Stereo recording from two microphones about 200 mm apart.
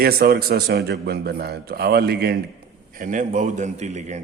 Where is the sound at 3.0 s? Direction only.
40° right (ahead or behind).